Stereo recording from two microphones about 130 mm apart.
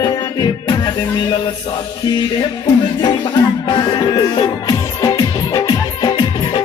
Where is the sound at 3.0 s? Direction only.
35° left (ahead or behind).